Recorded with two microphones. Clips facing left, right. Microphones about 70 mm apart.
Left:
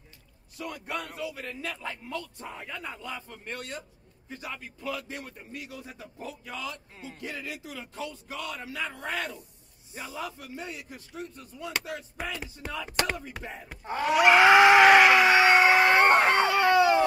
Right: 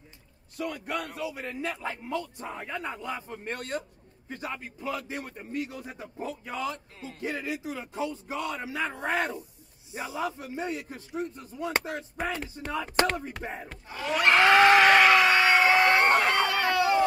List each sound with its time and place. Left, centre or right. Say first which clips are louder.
0.6 s a man's voice: right 3 dB; centre
1.2 s a man's voice: right 2 dB; centre; by 4.6 s right
4.6 s a man's voice: right 2 dB; right
12.6 s a man's voice: right 5 dB; right
14.0 s screaming: left 3 dB; centre
15.4 s a sound: left 1 dB; left